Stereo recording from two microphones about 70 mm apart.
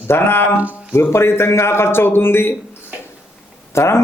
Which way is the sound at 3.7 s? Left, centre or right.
Left.